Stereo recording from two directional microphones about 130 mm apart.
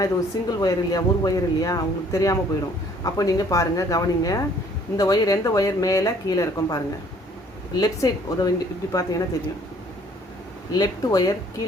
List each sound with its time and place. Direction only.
0.0 s speech: 30° left (ahead or behind)
10.8 s speech: 30° left (ahead or behind)